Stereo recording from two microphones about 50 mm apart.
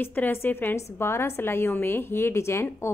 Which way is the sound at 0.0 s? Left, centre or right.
Left.